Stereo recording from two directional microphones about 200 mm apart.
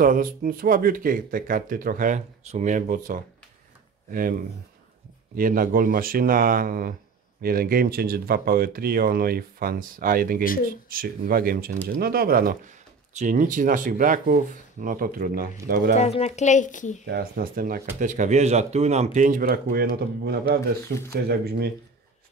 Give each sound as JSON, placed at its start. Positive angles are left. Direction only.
{"t": 0.0, "sound": "speech", "side_deg": -45}
{"t": 15.9, "sound": "speech", "side_deg": 30}
{"t": 17.0, "sound": "a man's voice", "side_deg": -50}